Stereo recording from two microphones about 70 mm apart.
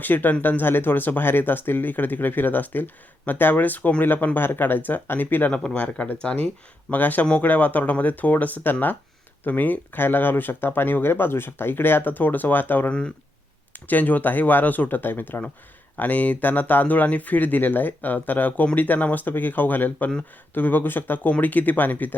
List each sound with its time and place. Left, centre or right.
0.0 s speech: left